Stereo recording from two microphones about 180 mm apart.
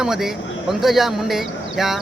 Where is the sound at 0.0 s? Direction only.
Centre (ahead or behind).